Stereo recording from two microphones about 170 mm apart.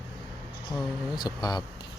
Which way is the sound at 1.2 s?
25° left (ahead or behind).